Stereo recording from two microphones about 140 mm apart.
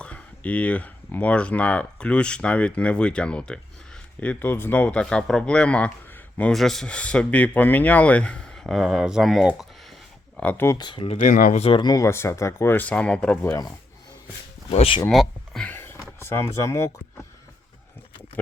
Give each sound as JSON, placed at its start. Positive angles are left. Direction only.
{"t": 0.0, "sound": "speech", "side_deg": 10}
{"t": 10.3, "sound": "speech", "side_deg": 10}
{"t": 10.8, "sound": "speech", "side_deg": 35}
{"t": 11.2, "sound": "speech", "side_deg": 70}
{"t": 11.6, "sound": "speech", "side_deg": 35}
{"t": 13.4, "sound": "speech", "side_deg": 20}
{"t": 14.7, "sound": "speech", "side_deg": 45}
{"t": 15.1, "sound": "a sound", "side_deg": 0}
{"t": 15.6, "sound": "a sound", "side_deg": 15}
{"t": 16.2, "sound": "speech", "side_deg": 20}